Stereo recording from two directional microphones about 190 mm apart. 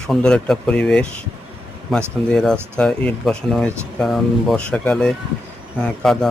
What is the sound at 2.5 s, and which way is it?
Speech, 10° right (ahead or behind).